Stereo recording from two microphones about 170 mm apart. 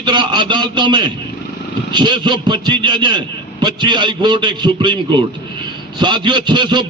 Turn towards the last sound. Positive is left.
turn(degrees=-25)  # may be behind; listen again after turning